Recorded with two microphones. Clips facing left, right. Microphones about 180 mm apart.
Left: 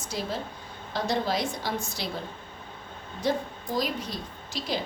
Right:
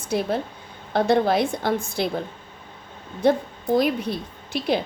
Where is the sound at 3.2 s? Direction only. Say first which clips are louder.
Right 8 dB; 60° right (ahead or behind).